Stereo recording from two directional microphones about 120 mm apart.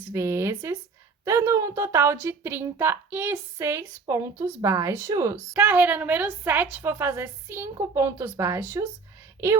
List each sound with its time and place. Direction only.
0.1 s a woman's voice: 25° right (ahead or behind)
5.5 s a woman's voice: 15° right (ahead or behind)